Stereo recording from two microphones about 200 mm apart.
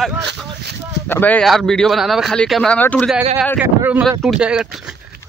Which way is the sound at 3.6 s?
10° right (ahead or behind).